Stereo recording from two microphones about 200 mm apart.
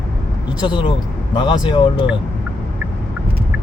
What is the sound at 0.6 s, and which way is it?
Speech, 25° left (ahead or behind).